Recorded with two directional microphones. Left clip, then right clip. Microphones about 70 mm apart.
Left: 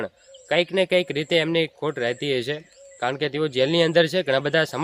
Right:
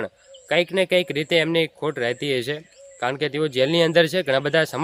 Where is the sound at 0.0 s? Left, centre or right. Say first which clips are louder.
Right 1 dB; right.